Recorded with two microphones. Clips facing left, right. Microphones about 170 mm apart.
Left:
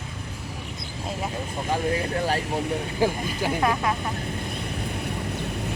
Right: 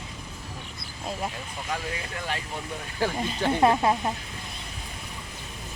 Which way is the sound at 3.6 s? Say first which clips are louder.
Right 4 dB; 25° right (ahead or behind).